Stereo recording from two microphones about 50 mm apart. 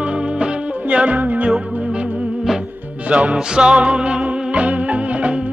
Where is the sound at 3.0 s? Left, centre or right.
Right.